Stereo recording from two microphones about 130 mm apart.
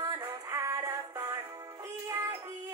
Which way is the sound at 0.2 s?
25° right (ahead or behind).